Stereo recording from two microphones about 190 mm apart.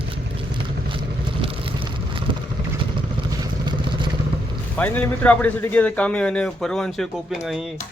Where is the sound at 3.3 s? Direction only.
20° right (ahead or behind).